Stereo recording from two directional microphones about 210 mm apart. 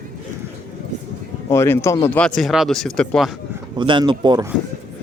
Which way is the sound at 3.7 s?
20° right (ahead or behind).